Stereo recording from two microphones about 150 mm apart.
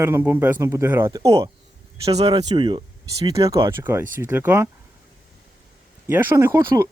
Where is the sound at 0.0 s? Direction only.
15° right (ahead or behind).